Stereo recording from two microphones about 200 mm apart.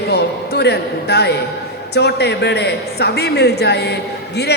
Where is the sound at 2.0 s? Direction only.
55° left (ahead or behind).